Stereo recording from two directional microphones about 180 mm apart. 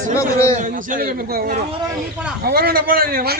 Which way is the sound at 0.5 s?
45° right (ahead or behind).